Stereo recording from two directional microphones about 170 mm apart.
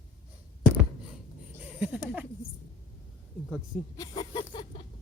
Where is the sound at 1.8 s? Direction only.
5° right (ahead or behind).